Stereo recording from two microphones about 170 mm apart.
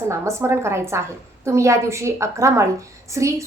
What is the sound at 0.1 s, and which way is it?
A woman's voice, 15° right (ahead or behind).